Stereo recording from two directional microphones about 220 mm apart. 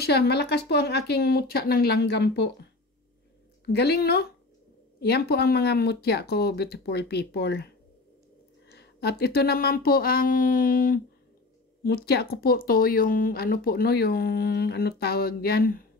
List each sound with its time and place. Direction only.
0.0 s speech: 45° left (ahead or behind)
3.7 s speech: 45° left (ahead or behind)
8.7 s speech: 45° left (ahead or behind)